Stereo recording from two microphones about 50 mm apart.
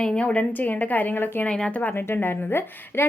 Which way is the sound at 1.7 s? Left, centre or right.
Left.